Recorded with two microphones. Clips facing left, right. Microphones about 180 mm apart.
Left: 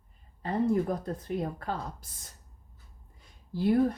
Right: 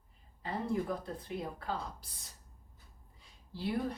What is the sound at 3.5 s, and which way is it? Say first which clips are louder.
Speech: left 10 dB; 50° left (ahead or behind).